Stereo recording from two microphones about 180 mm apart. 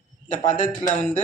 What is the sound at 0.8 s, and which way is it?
Speech, 45° left (ahead or behind).